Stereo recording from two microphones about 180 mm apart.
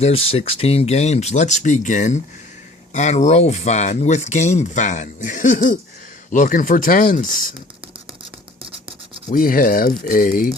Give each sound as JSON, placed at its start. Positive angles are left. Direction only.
{"t": 0.3, "sound": "speech", "side_deg": 35}
{"t": 9.3, "sound": "speech", "side_deg": 50}